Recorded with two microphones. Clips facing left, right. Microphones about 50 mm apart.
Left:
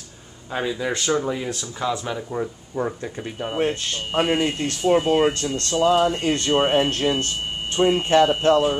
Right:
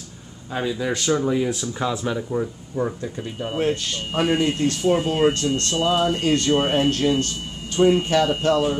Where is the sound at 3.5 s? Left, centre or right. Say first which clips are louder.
Even; left.